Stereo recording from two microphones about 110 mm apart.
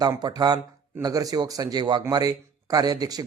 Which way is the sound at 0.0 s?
40° right (ahead or behind).